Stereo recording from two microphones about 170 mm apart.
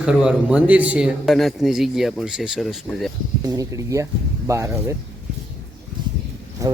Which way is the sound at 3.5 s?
20° right (ahead or behind).